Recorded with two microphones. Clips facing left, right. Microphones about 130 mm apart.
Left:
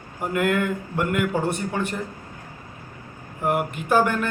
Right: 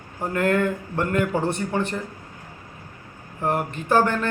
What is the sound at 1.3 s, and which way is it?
Speech, 20° right (ahead or behind).